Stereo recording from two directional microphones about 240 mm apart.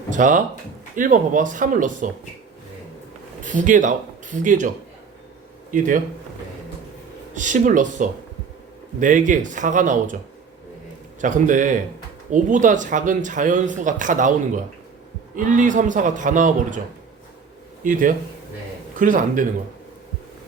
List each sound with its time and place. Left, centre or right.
0.1 s speech: right
3.4 s speech: right
5.7 s speech: right
7.3 s speech: right
11.2 s speech: right
18.9 s speech: right